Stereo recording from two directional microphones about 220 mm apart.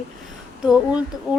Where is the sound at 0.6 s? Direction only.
5° right (ahead or behind).